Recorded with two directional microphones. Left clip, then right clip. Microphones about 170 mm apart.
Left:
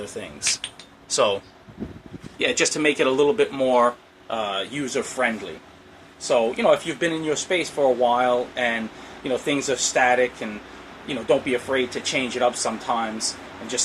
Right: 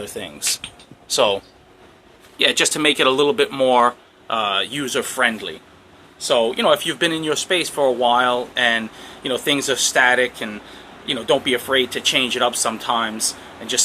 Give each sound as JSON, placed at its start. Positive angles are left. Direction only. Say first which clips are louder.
{"t": 0.0, "sound": "speech", "louder": "right 1 dB", "side_deg": -10}
{"t": 2.4, "sound": "speech", "louder": "right 4 dB", "side_deg": -10}